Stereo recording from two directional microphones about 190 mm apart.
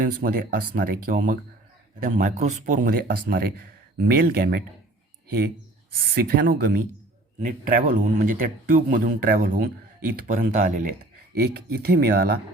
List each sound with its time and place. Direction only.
0.0 s speech: 45° right (ahead or behind)
6.1 s speech: 50° right (ahead or behind)
11.4 s speech: 55° right (ahead or behind)